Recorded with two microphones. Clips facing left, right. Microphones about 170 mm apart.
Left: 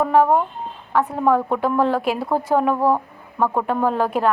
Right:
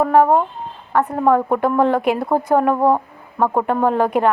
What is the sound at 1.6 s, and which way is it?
Speech, 15° right (ahead or behind).